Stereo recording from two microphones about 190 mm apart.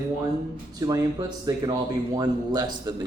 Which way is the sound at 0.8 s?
20° right (ahead or behind).